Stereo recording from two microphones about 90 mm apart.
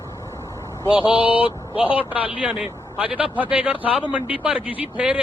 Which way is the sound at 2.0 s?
15° right (ahead or behind).